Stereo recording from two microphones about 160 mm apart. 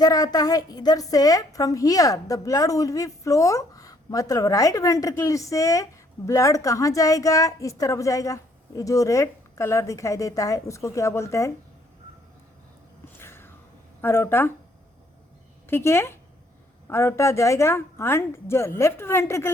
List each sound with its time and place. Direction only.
0.0 s a woman's voice: 25° left (ahead or behind)
13.1 s a sound: 15° left (ahead or behind)
14.0 s speech: 15° left (ahead or behind)
15.6 s speech: 15° left (ahead or behind)